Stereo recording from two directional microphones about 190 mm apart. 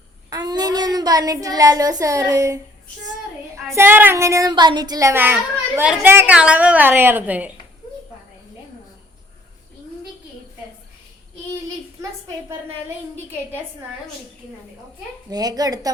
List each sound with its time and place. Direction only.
0.3 s speech: 20° right (ahead or behind)
3.7 s child singing: 10° right (ahead or behind)
15.3 s speech: 20° right (ahead or behind)